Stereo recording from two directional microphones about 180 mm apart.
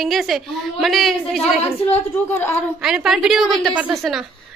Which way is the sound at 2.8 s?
Centre (ahead or behind).